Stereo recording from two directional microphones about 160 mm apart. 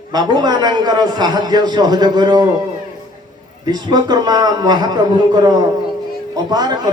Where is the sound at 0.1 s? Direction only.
25° right (ahead or behind).